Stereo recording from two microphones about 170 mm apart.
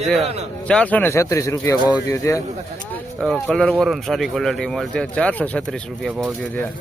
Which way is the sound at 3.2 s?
Centre (ahead or behind).